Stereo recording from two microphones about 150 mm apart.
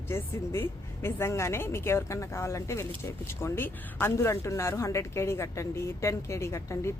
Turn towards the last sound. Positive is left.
turn(degrees=20)  # may be behind; listen again after turning